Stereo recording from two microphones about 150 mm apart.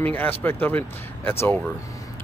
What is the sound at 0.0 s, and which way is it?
Speech, 10° left (ahead or behind).